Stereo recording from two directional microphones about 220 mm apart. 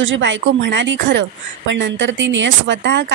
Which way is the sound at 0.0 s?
55° right (ahead or behind).